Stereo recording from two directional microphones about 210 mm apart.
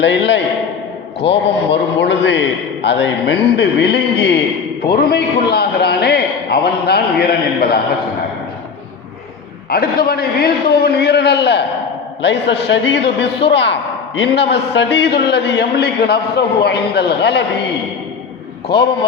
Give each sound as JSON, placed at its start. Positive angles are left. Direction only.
{"t": 0.0, "sound": "a man's voice", "side_deg": 55}
{"t": 9.6, "sound": "a man's voice", "side_deg": 45}
{"t": 18.7, "sound": "a man's voice", "side_deg": 50}